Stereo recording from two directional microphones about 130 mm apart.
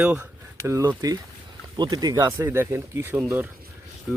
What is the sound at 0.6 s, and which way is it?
Speech, 20° right (ahead or behind).